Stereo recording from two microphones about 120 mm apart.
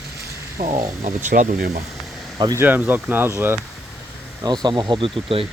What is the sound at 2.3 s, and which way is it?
Speech, 35° right (ahead or behind).